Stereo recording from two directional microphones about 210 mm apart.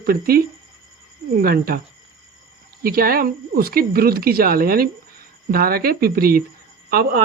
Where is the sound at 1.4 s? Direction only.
45° right (ahead or behind).